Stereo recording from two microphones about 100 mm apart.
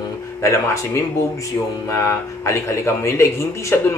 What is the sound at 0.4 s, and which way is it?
A man's voice, 30° left (ahead or behind).